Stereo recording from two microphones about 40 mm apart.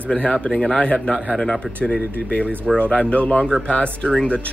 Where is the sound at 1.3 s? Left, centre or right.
Centre.